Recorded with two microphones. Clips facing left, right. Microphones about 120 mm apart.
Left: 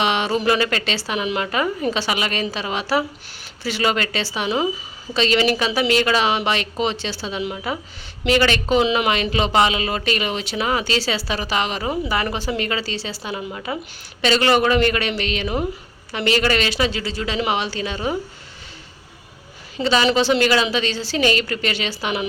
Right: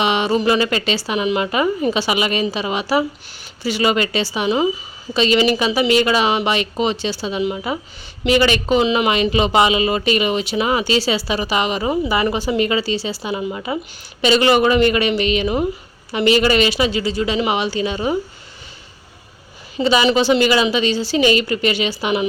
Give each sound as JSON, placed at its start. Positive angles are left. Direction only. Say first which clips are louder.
{"t": 0.0, "sound": "speech", "louder": "right 3 dB", "side_deg": -5}
{"t": 19.7, "sound": "speech", "louder": "right 3 dB", "side_deg": -10}